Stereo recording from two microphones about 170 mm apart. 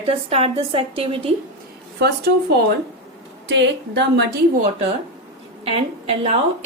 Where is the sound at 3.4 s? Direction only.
90° right.